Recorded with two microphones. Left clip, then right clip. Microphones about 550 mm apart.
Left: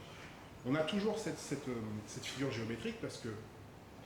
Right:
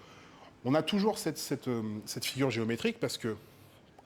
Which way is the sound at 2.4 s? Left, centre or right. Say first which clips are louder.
Right 9 dB; right.